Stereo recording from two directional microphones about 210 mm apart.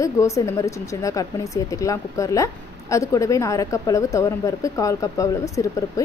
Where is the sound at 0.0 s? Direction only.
15° left (ahead or behind).